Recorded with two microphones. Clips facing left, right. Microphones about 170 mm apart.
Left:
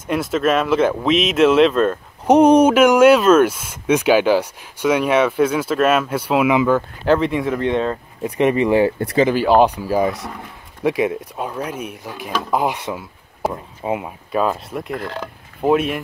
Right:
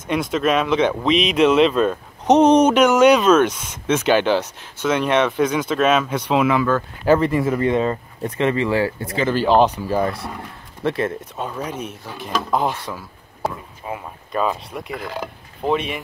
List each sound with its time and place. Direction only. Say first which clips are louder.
0.1 s speech: left 1 dB; 5° left (ahead or behind)
7.1 s speech: right 1 dB; centre (ahead or behind)
8.4 s speech: left 4 dB; 20° left (ahead or behind)
14.3 s speech: left 3 dB; 5° left (ahead or behind)